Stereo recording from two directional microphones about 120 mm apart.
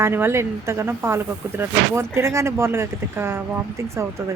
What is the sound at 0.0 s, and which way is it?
Speech, 20° right (ahead or behind).